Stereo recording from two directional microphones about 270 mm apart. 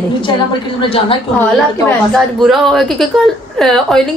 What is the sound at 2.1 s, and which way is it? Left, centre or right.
A woman's voice, centre.